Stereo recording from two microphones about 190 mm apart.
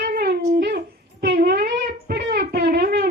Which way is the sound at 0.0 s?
55° right (ahead or behind).